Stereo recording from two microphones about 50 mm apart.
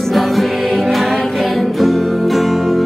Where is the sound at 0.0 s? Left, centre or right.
Centre.